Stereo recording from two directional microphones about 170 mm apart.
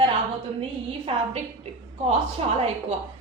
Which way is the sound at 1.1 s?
35° right (ahead or behind).